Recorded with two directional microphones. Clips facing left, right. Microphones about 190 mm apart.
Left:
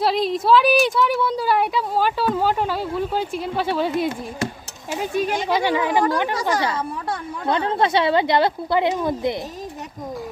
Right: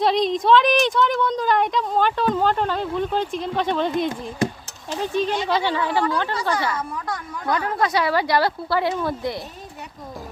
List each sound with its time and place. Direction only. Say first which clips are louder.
0.0 s a woman's voice: right 1 dB; 5° left (ahead or behind)